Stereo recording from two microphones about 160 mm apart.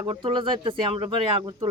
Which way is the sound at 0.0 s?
30° right (ahead or behind).